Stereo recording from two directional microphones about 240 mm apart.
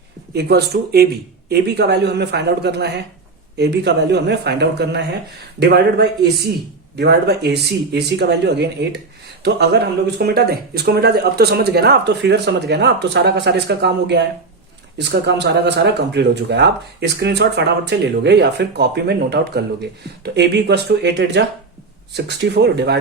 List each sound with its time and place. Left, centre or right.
0.3 s speech: right